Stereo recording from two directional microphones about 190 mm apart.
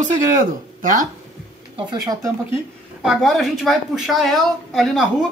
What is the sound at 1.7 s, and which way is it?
Speech, 20° right (ahead or behind).